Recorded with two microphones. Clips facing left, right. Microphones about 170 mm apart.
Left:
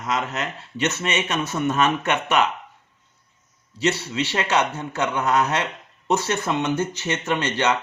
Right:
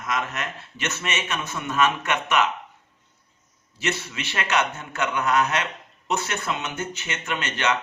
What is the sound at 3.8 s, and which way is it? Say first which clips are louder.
A man's voice: left 6 dB; 30° left (ahead or behind).